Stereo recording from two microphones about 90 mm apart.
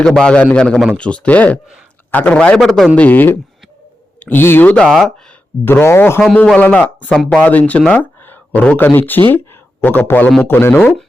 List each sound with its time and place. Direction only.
0.0 s a man's voice: 10° left (ahead or behind)
2.9 s speech: 15° left (ahead or behind)
4.8 s speech: centre (ahead or behind)
5.6 s speech: 25° left (ahead or behind)
6.2 s a man's voice: 10° left (ahead or behind)